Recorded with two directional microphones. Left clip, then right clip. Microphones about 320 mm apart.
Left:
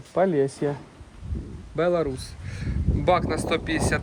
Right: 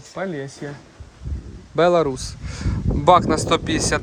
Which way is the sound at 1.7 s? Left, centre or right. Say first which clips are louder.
Right 7 dB; centre.